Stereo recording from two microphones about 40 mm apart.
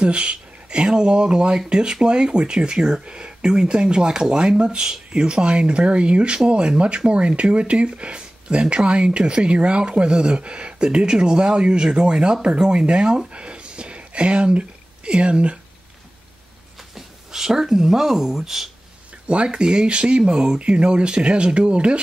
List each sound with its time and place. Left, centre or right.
0.0 s speech: right
13.3 s a sound: right
16.9 s speech: centre
19.2 s speech: right